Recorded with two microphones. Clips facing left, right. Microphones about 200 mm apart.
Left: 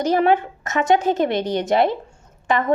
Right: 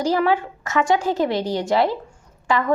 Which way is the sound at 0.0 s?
20° left (ahead or behind).